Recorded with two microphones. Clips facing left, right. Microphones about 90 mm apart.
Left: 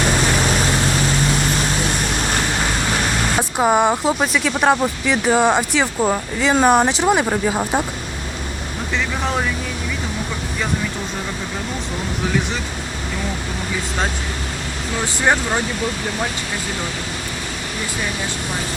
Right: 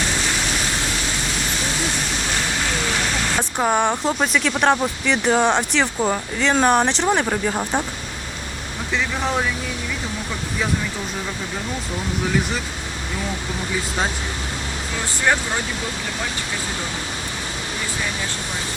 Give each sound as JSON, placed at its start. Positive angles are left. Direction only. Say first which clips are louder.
{"t": 3.3, "sound": "speech", "louder": "left 4 dB", "side_deg": 10}
{"t": 9.2, "sound": "speech", "louder": "even", "side_deg": 0}
{"t": 12.3, "sound": "speech", "louder": "even", "side_deg": 0}
{"t": 15.2, "sound": "speech", "louder": "left 2 dB", "side_deg": 20}